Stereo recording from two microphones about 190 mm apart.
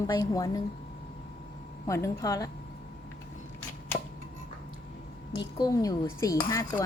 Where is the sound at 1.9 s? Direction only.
15° left (ahead or behind).